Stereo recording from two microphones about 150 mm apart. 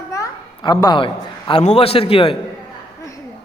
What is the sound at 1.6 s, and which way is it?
Speech, 45° left (ahead or behind).